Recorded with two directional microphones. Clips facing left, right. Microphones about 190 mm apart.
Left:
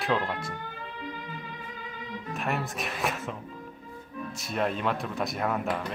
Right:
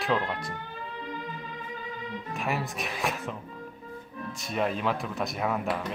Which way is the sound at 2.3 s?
Centre (ahead or behind).